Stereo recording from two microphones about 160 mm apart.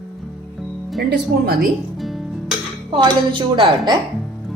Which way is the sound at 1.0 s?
75° right (ahead or behind).